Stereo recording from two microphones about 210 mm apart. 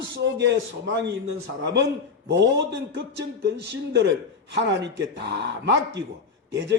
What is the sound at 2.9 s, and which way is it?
A man's voice, 55° right (ahead or behind).